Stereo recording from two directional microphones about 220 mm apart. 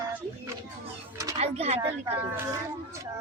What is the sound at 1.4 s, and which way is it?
Speech, 30° right (ahead or behind).